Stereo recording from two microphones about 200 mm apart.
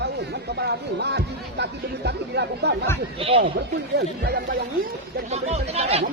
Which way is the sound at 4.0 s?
50° right (ahead or behind).